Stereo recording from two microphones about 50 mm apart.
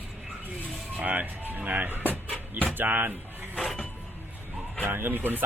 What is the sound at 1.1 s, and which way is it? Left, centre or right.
Speech, right.